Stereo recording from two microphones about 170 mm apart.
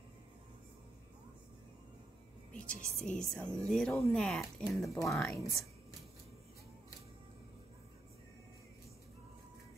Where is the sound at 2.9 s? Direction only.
5° left (ahead or behind).